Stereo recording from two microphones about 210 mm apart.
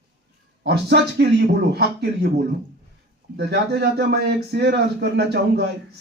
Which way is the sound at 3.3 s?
55° right (ahead or behind).